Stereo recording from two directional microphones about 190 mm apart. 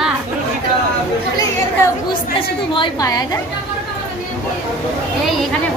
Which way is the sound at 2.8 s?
20° left (ahead or behind).